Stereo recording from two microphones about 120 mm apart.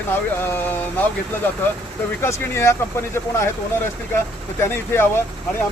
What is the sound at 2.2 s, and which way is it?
Speech, 20° left (ahead or behind).